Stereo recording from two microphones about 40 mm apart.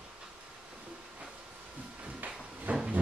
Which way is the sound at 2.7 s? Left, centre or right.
Right.